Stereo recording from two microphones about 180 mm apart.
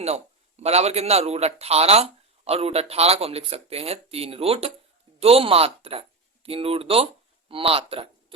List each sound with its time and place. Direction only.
0.0 s a man's voice: 35° right (ahead or behind)